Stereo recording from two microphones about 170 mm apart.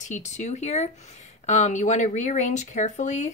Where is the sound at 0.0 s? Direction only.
45° left (ahead or behind).